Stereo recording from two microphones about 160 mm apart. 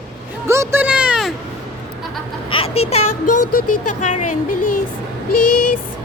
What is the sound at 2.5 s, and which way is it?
Vehicle, 35° left (ahead or behind).